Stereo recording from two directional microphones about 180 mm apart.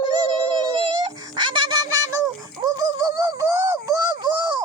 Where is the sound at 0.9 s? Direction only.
25° right (ahead or behind).